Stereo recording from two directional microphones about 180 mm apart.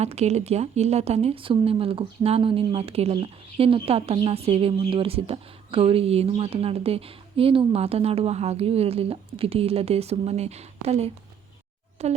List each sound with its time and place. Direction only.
0.0 s a woman's voice: 35° right (ahead or behind)